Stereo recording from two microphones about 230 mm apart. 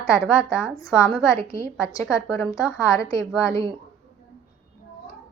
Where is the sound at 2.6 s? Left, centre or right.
Centre.